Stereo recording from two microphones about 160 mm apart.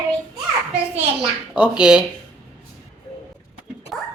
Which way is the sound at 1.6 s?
5° right (ahead or behind).